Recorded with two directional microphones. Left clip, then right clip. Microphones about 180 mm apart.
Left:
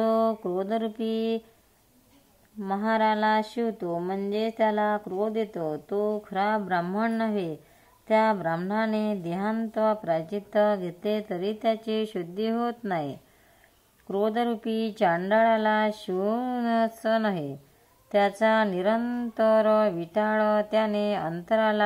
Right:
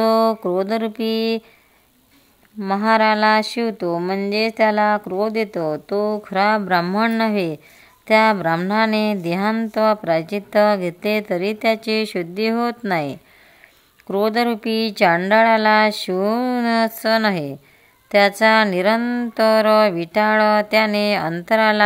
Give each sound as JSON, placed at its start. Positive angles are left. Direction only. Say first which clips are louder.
{"t": 0.0, "sound": "speech", "louder": "right 8 dB", "side_deg": -35}
{"t": 2.7, "sound": "speech", "louder": "right 9 dB", "side_deg": -35}
{"t": 12.5, "sound": "music", "louder": "right 8 dB", "side_deg": -30}
{"t": 14.0, "sound": "speech", "louder": "right 8 dB", "side_deg": -30}
{"t": 18.4, "sound": "music", "louder": "right 8 dB", "side_deg": -30}